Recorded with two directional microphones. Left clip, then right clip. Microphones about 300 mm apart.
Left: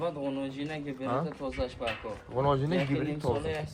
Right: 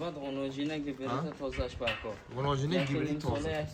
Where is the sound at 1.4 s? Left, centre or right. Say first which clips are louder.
Left 2 dB; left.